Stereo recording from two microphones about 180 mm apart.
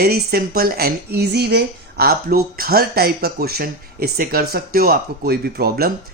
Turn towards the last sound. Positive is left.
turn(degrees=-60)  # may be behind; listen again after turning